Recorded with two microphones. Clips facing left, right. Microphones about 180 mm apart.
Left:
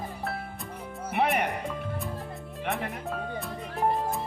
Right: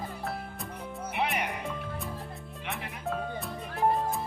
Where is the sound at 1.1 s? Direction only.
55° left (ahead or behind).